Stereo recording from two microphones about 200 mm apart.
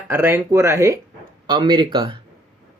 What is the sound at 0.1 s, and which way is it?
Speech, 10° right (ahead or behind).